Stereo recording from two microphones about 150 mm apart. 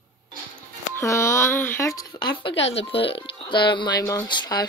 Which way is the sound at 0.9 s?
20° left (ahead or behind).